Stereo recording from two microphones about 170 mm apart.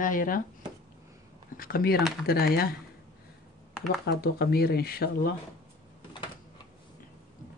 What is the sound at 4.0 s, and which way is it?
Speech, 80° left.